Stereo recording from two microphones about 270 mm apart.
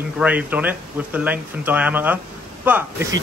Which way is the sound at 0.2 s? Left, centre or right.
Centre.